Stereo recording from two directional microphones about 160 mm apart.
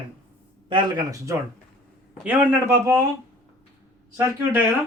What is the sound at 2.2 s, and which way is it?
Speech, 10° right (ahead or behind).